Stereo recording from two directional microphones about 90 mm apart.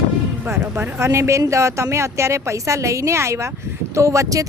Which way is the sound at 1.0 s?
30° right (ahead or behind).